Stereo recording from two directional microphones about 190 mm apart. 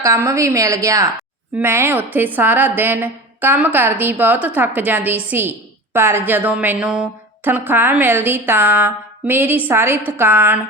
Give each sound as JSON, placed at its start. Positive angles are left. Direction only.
{"t": 0.0, "sound": "a woman's voice", "side_deg": -15}